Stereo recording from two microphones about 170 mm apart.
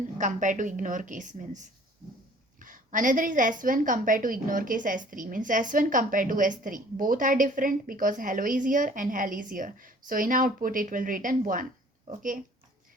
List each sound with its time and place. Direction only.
0.2 s a woman's voice: 50° right (ahead or behind)